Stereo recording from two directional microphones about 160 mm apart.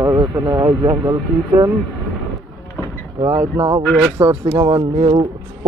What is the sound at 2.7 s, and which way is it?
Vehicle, 15° left (ahead or behind).